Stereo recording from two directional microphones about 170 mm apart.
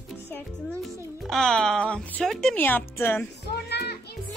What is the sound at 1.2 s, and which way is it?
A woman's voice, centre (ahead or behind).